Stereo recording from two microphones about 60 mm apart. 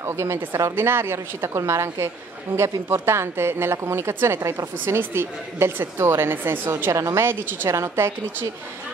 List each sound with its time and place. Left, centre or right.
0.0 s a woman's voice: right
0.7 s a woman's voice: right
2.5 s a woman's voice: right
2.9 s a woman's voice: right
4.4 s speech: right
4.8 s a woman's voice: right
7.7 s a woman's voice: right